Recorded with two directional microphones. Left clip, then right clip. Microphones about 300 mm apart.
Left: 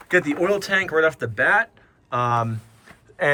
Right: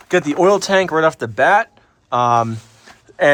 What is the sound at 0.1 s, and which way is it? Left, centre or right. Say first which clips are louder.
Speech: right 6 dB; centre.